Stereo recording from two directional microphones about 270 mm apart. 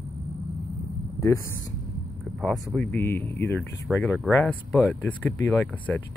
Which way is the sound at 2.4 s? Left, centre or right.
Centre.